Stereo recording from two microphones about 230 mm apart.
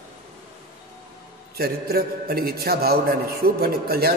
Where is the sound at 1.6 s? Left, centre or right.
Right.